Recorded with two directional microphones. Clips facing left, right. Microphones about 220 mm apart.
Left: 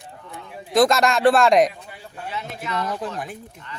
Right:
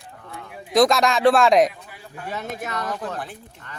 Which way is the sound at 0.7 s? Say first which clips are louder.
Even; centre (ahead or behind).